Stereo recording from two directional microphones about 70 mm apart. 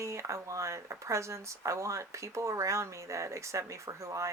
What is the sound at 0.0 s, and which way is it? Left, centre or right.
Speech, right.